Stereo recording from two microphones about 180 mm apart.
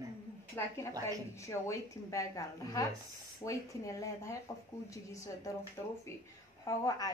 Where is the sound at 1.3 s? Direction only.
15° left (ahead or behind).